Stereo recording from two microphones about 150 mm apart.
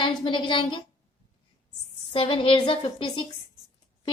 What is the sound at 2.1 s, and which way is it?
A woman's voice, 35° left (ahead or behind).